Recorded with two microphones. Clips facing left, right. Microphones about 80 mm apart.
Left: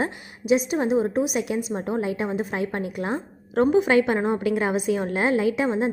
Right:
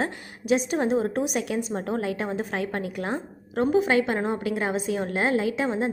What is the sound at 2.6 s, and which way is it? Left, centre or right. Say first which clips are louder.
A woman's voice: left 2 dB; left.